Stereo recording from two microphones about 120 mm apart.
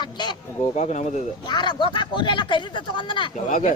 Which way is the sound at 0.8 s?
70° left (ahead or behind).